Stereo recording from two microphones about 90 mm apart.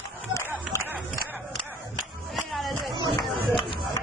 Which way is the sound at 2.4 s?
Centre (ahead or behind).